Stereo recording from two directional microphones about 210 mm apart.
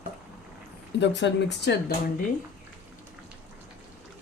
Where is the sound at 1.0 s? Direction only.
55° left (ahead or behind).